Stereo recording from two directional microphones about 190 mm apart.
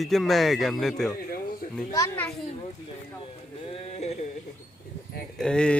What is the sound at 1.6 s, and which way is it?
Children playing, 45° left (ahead or behind).